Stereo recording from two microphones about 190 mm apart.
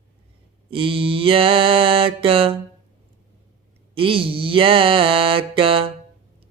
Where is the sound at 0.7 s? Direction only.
30° right (ahead or behind).